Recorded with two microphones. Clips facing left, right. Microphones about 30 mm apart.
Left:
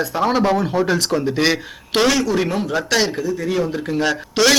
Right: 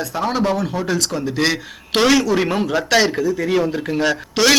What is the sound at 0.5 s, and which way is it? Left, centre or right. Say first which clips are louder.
Speech: left 4 dB; left.